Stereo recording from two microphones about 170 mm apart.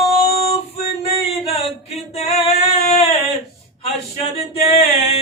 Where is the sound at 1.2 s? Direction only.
35° left (ahead or behind).